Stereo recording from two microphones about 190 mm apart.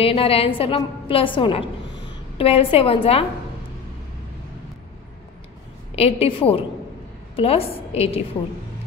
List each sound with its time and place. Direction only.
0.0 s a woman's voice: 30° left (ahead or behind)
5.9 s a woman's voice: 30° left (ahead or behind)